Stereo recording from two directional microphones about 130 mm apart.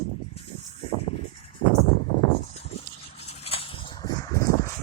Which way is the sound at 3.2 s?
50° left (ahead or behind).